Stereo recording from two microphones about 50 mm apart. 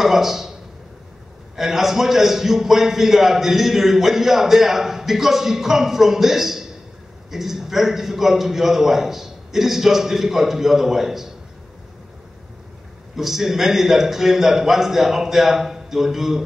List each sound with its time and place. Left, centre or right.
0.0 s a man's voice: centre
1.6 s a man's voice: centre
13.1 s a man's voice: centre